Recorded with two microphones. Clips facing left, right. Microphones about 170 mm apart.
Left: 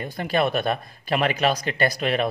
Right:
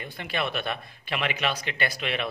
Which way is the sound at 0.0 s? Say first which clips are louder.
Left 8 dB; 40° left (ahead or behind).